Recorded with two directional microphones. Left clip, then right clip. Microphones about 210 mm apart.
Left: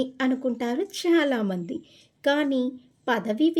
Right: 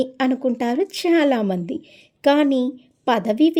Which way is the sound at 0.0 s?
30° right (ahead or behind).